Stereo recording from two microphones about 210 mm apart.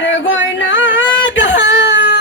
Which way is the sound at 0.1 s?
65° left (ahead or behind).